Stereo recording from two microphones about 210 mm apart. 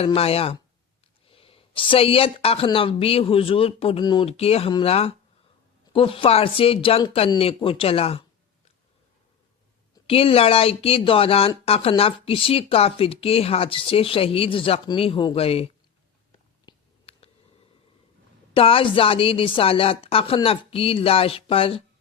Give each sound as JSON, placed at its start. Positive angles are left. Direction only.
{"t": 0.0, "sound": "speech", "side_deg": 30}
{"t": 9.9, "sound": "speech", "side_deg": 25}
{"t": 16.6, "sound": "a sound", "side_deg": 25}
{"t": 18.5, "sound": "speech", "side_deg": 25}